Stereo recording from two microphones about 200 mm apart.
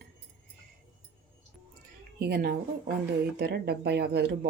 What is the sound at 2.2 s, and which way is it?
Speech, 55° right (ahead or behind).